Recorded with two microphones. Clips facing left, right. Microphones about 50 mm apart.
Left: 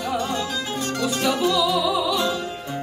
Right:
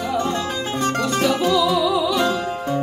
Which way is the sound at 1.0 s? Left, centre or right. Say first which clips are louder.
Right 1 dB; centre.